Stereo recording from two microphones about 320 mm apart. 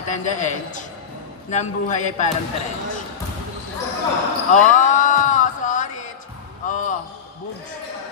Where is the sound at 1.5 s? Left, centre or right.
Left.